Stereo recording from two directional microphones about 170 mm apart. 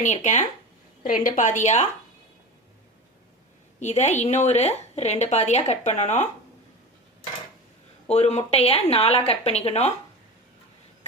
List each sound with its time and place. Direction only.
0.0 s a woman's voice: 45° left (ahead or behind)
3.8 s a woman's voice: 45° left (ahead or behind)
8.0 s a woman's voice: 40° left (ahead or behind)